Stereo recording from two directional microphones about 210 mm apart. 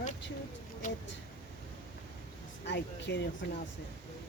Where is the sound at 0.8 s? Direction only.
40° left (ahead or behind).